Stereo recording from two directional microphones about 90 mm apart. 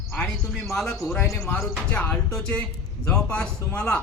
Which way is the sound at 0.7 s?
10° left (ahead or behind).